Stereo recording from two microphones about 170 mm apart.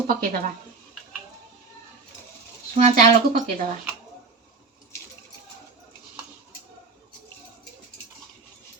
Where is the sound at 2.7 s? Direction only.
50° right (ahead or behind).